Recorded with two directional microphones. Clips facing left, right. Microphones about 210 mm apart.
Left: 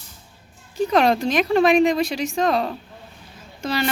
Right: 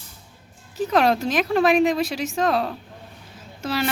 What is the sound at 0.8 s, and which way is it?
Speech, 5° right (ahead or behind).